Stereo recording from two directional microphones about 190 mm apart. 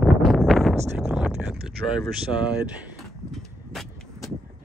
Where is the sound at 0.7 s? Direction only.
15° right (ahead or behind).